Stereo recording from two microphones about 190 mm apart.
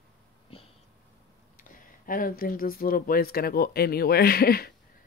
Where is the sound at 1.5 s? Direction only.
45° left (ahead or behind).